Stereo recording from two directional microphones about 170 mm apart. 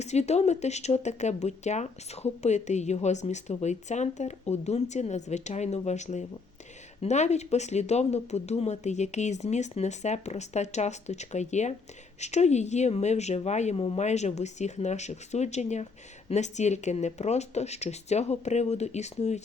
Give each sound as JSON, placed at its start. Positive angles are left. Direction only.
{"t": 0.0, "sound": "speech", "side_deg": 40}